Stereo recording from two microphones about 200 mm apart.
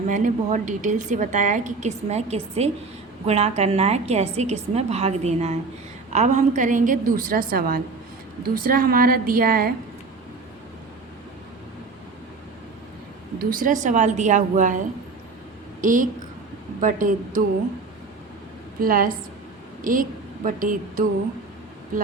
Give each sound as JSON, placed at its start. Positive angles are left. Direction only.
{"t": 0.1, "sound": "a woman's voice", "side_deg": -40}
{"t": 13.4, "sound": "a woman's voice", "side_deg": -45}
{"t": 18.8, "sound": "a woman's voice", "side_deg": -45}